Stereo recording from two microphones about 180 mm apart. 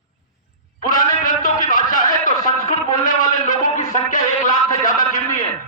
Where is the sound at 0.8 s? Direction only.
45° left (ahead or behind).